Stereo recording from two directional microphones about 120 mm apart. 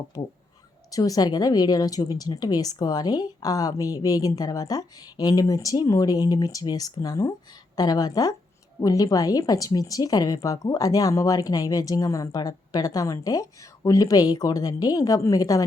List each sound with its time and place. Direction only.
0.1 s a woman's voice: 30° left (ahead or behind)